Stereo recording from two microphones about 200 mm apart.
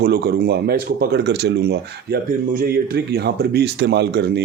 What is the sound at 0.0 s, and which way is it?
Speech, 50° right (ahead or behind).